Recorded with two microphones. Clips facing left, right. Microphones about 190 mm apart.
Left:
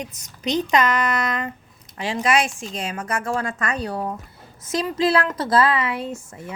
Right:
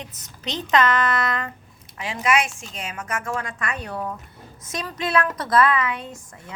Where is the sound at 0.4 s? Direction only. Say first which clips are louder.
Left 1 dB; 15° left (ahead or behind).